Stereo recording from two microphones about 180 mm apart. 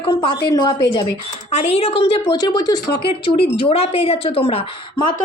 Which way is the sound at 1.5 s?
35° left (ahead or behind).